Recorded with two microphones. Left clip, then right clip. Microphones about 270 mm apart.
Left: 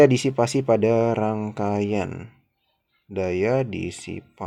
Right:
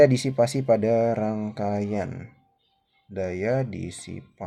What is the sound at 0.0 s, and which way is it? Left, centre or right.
Speech, left.